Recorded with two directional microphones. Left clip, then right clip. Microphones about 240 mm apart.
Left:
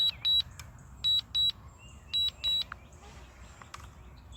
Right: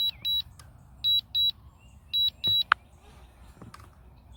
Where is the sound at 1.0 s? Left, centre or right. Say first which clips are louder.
Right 3 dB; centre.